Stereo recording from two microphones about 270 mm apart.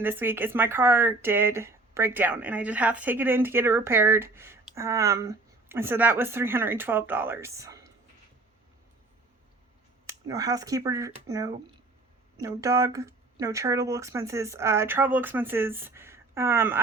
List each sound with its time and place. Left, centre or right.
0.0 s speech: centre
10.2 s speech: centre